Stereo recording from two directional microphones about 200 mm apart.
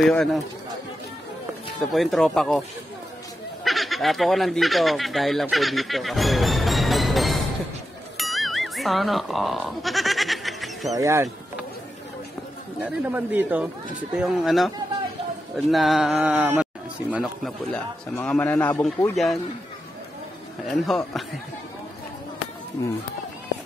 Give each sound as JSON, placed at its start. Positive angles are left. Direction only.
{"t": 0.0, "sound": "a man's voice", "side_deg": 5}
{"t": 1.8, "sound": "a man's voice", "side_deg": 0}
{"t": 3.6, "sound": "speech", "side_deg": 0}
{"t": 8.2, "sound": "goat", "side_deg": 0}
{"t": 11.0, "sound": "speech", "side_deg": -15}
{"t": 12.8, "sound": "a man's voice", "side_deg": -10}
{"t": 20.8, "sound": "a man's voice", "side_deg": 0}
{"t": 22.8, "sound": "a man's voice", "side_deg": 15}